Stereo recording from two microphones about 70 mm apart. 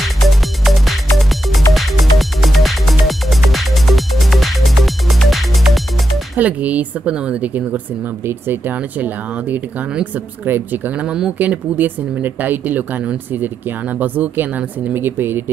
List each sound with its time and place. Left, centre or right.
0.3 s music: centre
6.3 s speech: right
11.3 s speech: right